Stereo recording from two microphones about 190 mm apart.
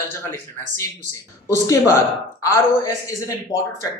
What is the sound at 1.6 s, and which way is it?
A man's voice, 15° left (ahead or behind).